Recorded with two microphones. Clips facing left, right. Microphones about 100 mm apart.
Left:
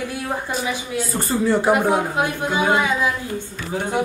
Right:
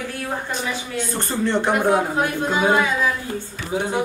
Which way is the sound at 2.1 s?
15° left (ahead or behind).